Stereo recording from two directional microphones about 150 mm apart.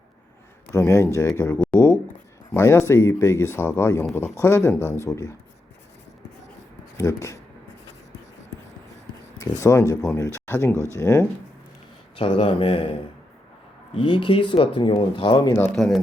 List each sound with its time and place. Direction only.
0.7 s speech: 20° left (ahead or behind)
6.9 s speech: 20° left (ahead or behind)
9.4 s speech: 20° left (ahead or behind)
12.1 s speech: 40° left (ahead or behind)
13.9 s speech: 35° left (ahead or behind)
15.7 s speech: 5° left (ahead or behind)